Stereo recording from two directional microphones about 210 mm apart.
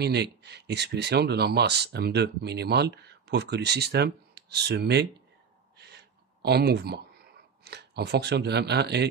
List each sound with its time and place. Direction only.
0.0 s speech: 50° right (ahead or behind)
5.8 s a sound: 50° right (ahead or behind)
7.6 s speech: 50° right (ahead or behind)